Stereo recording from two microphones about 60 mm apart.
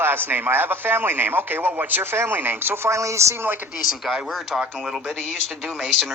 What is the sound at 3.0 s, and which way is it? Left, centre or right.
Speech, right.